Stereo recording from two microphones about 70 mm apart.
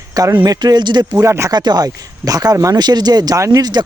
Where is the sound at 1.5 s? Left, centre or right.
Right.